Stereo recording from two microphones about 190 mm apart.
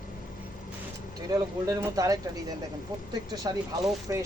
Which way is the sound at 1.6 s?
20° right (ahead or behind).